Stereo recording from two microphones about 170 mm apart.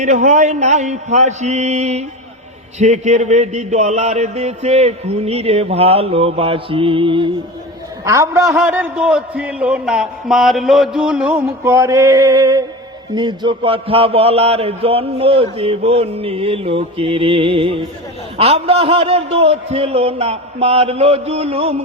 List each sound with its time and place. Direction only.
0.0 s mantra: 45° right (ahead or behind)
2.7 s speech: 45° right (ahead or behind)
8.0 s a man's voice: 20° right (ahead or behind)
8.5 s a man's voice: 5° right (ahead or behind); by 21.8 s 35° right (ahead or behind)